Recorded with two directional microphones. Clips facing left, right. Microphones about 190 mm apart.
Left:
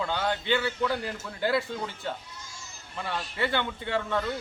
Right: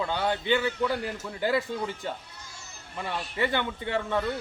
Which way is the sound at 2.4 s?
60° right (ahead or behind).